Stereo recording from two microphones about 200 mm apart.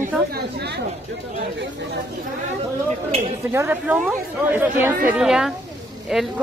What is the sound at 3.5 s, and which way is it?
Speech, 10° right (ahead or behind).